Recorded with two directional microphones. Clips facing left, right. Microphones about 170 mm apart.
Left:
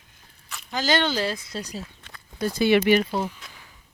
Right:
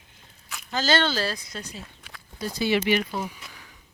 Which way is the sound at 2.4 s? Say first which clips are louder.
Left 5 dB; 55° left (ahead or behind).